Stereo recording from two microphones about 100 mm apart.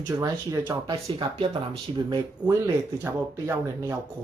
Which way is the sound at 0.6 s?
55° right (ahead or behind).